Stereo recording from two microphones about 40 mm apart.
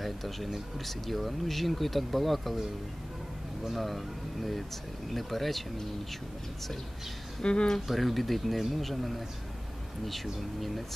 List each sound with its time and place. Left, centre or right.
0.0 s a sound: centre
0.7 s speech: centre
3.7 s speech: centre
7.4 s speech: left
7.9 s speech: centre